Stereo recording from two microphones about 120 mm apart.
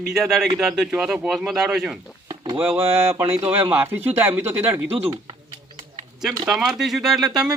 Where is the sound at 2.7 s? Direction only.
50° right (ahead or behind).